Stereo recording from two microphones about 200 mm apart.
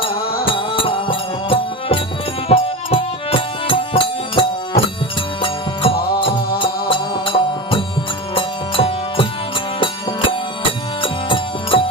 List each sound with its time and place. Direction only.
0.5 s music: 25° left (ahead or behind)
10.6 s music: 25° left (ahead or behind)